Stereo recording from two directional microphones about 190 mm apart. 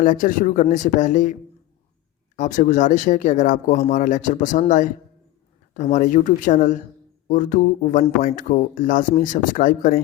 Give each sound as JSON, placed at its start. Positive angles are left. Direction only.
{"t": 0.0, "sound": "speech", "side_deg": 45}